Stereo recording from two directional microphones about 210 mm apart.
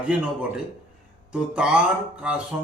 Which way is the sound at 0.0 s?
5° right (ahead or behind).